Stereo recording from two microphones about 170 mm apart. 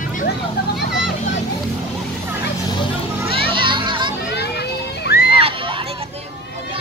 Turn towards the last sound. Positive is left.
turn(degrees=65)  # may be behind; listen again after turning